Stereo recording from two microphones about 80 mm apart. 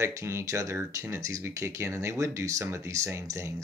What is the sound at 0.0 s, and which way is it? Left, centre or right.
Speech, right.